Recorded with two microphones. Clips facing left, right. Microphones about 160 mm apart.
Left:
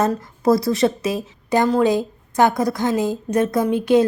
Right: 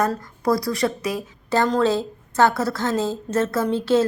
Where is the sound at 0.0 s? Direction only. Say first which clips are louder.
Left 3 dB; 25° left (ahead or behind).